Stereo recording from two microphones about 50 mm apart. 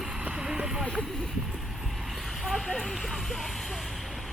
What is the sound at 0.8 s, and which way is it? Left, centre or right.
Speech, centre.